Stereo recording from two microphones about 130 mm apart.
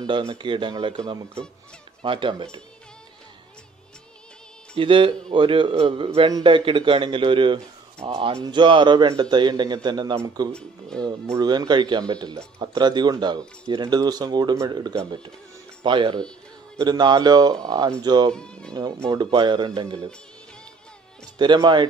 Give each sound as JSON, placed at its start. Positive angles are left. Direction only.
{"t": 0.3, "sound": "speech", "side_deg": -40}
{"t": 2.0, "sound": "speech", "side_deg": -40}
{"t": 4.7, "sound": "a man's voice", "side_deg": -45}
{"t": 10.9, "sound": "speech", "side_deg": 5}
{"t": 11.3, "sound": "speech", "side_deg": -30}
{"t": 18.3, "sound": "speech", "side_deg": 5}
{"t": 18.7, "sound": "speech", "side_deg": -30}
{"t": 21.4, "sound": "speech", "side_deg": -35}